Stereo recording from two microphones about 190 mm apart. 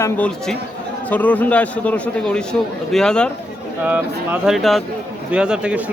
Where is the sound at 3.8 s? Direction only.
10° right (ahead or behind).